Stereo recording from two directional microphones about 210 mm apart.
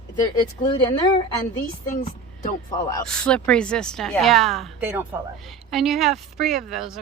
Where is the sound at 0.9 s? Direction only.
10° left (ahead or behind).